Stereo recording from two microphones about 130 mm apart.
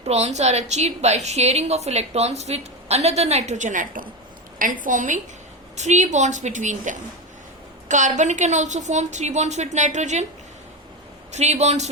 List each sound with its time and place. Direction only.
0.0 s a woman's voice: 55° right (ahead or behind); by 5.2 s 75° right (ahead or behind)
5.7 s a woman's voice: 65° right (ahead or behind)
11.3 s a woman's voice: 60° right (ahead or behind)